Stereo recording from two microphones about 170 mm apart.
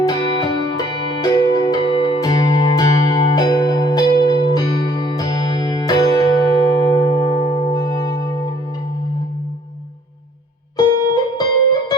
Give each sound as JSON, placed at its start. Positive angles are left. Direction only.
{"t": 0.0, "sound": "music", "side_deg": 25}
{"t": 10.8, "sound": "music", "side_deg": 25}